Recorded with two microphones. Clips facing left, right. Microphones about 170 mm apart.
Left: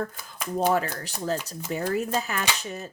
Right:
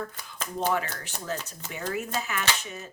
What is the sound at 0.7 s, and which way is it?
Speech, 35° left (ahead or behind).